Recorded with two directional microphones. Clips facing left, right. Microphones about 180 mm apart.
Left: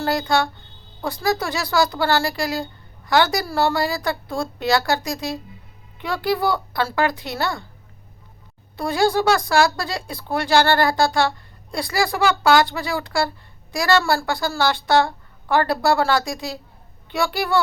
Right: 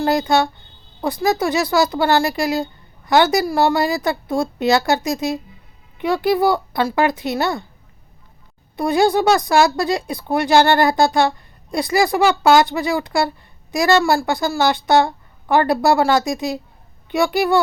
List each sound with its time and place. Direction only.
0.0 s speech: 20° right (ahead or behind)
8.7 s speech: 20° right (ahead or behind)